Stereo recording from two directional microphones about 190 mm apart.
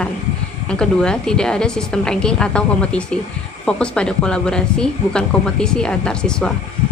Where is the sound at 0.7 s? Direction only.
5° left (ahead or behind).